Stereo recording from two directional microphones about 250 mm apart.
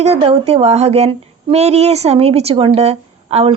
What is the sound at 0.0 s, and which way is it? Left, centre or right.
Speech, right.